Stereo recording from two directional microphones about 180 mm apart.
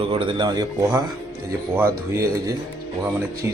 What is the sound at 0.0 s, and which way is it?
Speech, 30° right (ahead or behind).